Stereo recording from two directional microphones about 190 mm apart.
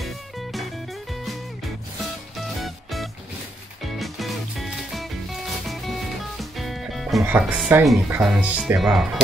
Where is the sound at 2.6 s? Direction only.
Centre (ahead or behind).